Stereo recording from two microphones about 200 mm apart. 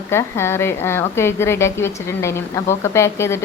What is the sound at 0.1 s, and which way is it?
A woman's voice, 15° left (ahead or behind).